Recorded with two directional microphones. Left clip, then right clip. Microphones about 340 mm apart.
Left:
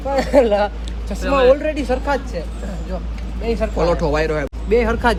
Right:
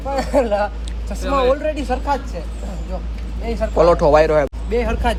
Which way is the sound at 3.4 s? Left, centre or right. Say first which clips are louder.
Left 2 dB; left.